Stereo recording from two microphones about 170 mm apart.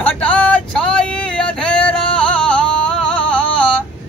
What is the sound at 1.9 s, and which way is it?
Music, 5° left (ahead or behind).